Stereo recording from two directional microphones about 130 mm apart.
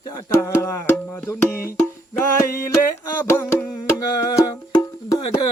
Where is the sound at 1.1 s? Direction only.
15° left (ahead or behind).